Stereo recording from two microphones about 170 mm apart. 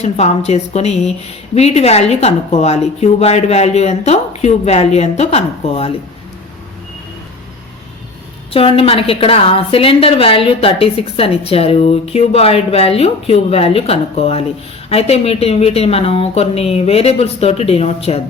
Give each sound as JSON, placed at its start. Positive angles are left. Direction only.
{"t": 0.0, "sound": "a woman's voice", "side_deg": 40}
{"t": 8.5, "sound": "a woman's voice", "side_deg": 35}